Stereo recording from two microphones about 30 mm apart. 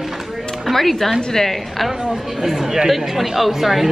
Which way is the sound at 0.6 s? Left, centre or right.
Centre.